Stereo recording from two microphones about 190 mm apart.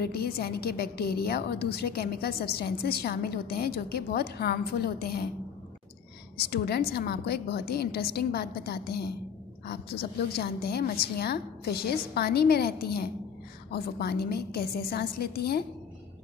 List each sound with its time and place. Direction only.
0.0 s a woman's voice: 55° left (ahead or behind)
6.5 s a woman's voice: 55° left (ahead or behind)